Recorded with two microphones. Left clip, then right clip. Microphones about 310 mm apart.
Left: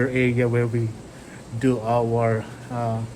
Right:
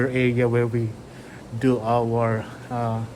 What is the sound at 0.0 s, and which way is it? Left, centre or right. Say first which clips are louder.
Speech: even; centre.